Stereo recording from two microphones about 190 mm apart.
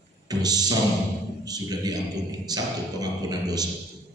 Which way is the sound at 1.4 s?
20° right (ahead or behind).